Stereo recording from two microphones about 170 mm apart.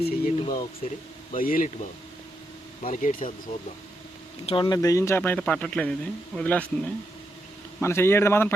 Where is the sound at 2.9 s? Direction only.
45° left (ahead or behind).